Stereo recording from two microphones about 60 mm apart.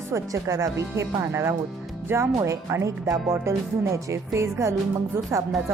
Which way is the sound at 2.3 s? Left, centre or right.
Right.